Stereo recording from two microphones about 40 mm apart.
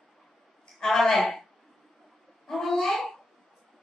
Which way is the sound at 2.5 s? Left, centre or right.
Centre.